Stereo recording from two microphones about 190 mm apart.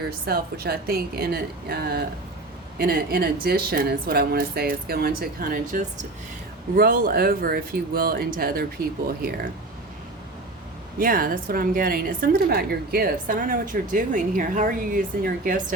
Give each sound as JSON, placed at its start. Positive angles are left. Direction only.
{"t": 0.0, "sound": "a woman's voice", "side_deg": -55}
{"t": 11.0, "sound": "a woman's voice", "side_deg": -50}